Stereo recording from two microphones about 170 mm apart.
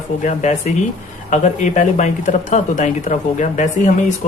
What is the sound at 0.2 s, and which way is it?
Speech, 50° left (ahead or behind).